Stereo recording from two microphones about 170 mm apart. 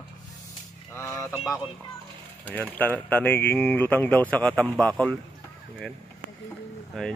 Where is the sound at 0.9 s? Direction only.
15° left (ahead or behind).